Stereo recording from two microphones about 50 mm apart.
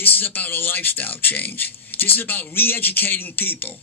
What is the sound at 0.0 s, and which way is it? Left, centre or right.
A man's voice, left.